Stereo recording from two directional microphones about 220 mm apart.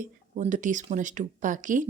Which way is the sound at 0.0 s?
35° right (ahead or behind).